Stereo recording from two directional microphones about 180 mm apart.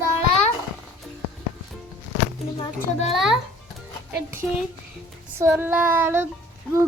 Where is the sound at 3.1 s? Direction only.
Centre (ahead or behind).